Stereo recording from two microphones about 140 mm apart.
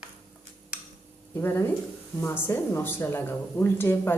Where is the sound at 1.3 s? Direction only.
15° left (ahead or behind).